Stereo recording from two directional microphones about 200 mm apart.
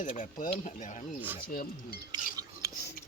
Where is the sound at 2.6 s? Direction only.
15° right (ahead or behind).